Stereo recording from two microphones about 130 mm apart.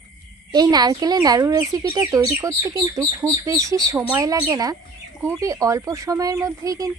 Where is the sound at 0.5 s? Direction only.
30° right (ahead or behind).